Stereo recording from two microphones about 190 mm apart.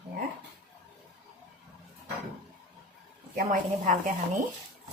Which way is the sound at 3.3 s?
45° right (ahead or behind).